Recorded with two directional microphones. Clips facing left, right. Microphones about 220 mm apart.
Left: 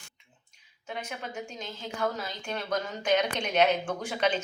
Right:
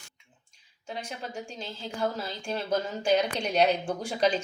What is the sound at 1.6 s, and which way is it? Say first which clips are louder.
Speech: right 1 dB; 30° right (ahead or behind).